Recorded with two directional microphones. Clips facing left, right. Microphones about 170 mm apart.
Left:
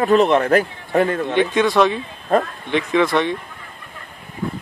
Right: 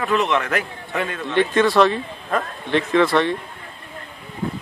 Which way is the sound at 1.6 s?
5° right (ahead or behind).